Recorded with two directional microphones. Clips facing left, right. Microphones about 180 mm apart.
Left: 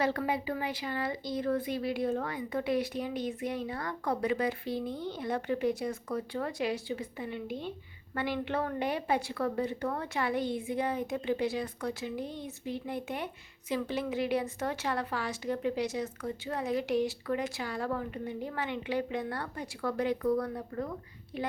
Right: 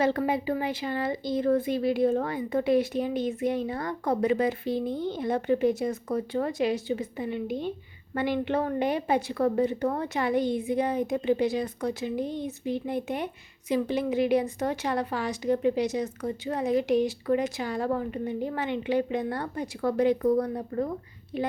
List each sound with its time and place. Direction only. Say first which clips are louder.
0.0 s a woman's voice: right 5 dB; 25° right (ahead or behind)